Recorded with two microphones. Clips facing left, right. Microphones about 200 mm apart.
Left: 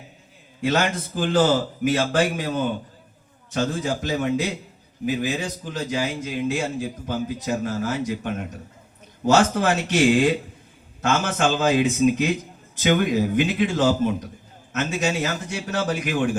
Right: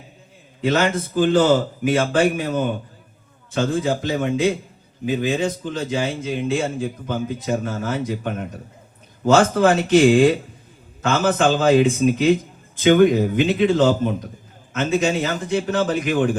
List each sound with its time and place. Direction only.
0.7 s a man's voice: 50° right (ahead or behind)